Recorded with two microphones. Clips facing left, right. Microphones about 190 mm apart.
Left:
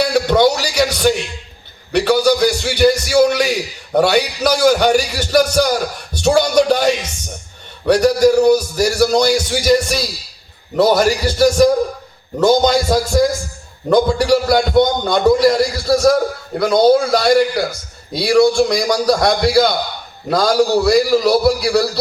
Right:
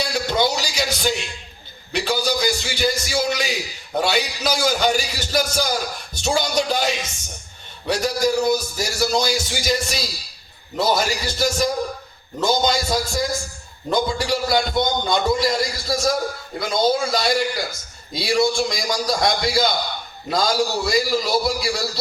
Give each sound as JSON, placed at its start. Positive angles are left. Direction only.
{"t": 0.0, "sound": "music", "side_deg": 60}
{"t": 1.9, "sound": "a man's voice", "side_deg": 65}